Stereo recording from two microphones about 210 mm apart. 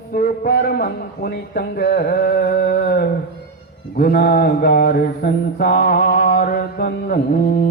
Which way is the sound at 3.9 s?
50° left (ahead or behind).